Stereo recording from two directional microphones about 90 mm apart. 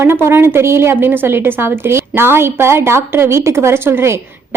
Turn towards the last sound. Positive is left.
turn(degrees=-30)  # may be behind; listen again after turning